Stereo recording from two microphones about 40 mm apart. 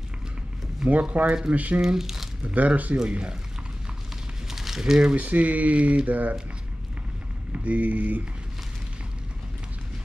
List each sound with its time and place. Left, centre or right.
0.8 s speech: centre
1.1 s speech: right
1.5 s speech: right
1.8 s speech: centre
2.4 s speech: right
3.1 s speech: right
4.5 s a sound: centre
5.1 s speech: right
7.5 s speech: right